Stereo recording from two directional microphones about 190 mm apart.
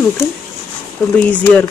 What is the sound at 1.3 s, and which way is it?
Speech, 10° left (ahead or behind).